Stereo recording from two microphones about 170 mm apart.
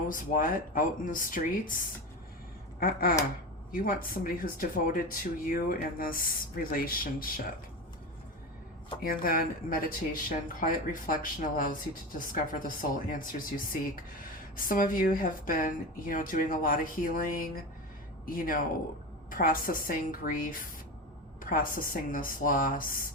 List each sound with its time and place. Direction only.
0.1 s speech: 55° left (ahead or behind)
2.8 s speech: 60° left (ahead or behind)
9.0 s speech: 55° left (ahead or behind)
14.5 s speech: 55° left (ahead or behind)